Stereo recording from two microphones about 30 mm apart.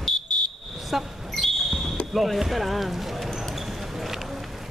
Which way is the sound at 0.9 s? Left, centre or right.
Centre.